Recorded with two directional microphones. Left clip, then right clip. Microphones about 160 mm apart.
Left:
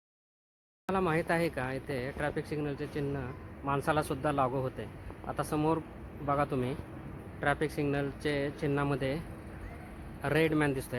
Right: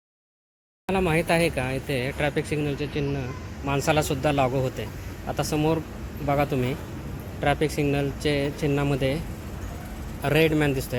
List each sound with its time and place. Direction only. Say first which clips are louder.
0.9 s speech: right 7 dB; 10° left (ahead or behind)
2.6 s speech: right 8 dB; 15° left (ahead or behind)
10.2 s speech: right 7 dB; 10° left (ahead or behind)